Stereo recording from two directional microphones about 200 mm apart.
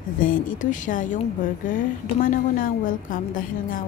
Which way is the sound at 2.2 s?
40° left (ahead or behind).